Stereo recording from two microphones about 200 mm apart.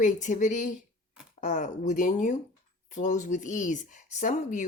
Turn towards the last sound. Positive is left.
turn(degrees=40)  # may be behind; listen again after turning